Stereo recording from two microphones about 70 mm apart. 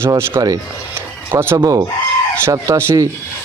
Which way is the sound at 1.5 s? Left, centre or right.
Right.